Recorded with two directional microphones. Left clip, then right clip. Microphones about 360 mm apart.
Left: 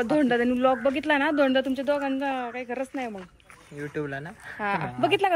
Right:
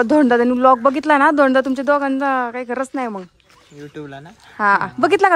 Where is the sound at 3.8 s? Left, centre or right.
Centre.